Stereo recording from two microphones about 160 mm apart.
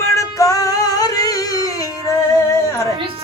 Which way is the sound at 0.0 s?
20° left (ahead or behind).